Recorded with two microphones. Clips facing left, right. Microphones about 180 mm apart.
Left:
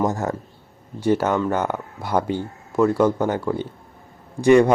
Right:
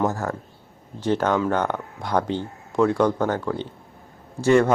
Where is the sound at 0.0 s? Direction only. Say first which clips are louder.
Left 2 dB; 20° left (ahead or behind).